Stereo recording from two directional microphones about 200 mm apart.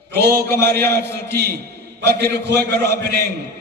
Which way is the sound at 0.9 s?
55° right (ahead or behind).